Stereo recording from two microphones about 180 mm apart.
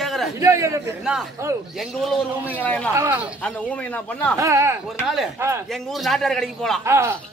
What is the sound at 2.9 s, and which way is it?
Speech, 10° right (ahead or behind).